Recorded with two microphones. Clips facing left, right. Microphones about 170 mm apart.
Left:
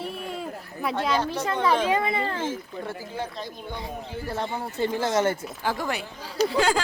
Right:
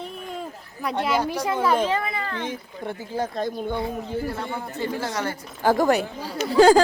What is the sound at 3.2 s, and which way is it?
Speech, 45° right (ahead or behind).